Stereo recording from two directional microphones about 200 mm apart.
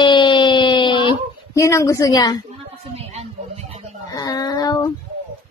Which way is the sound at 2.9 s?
30° right (ahead or behind).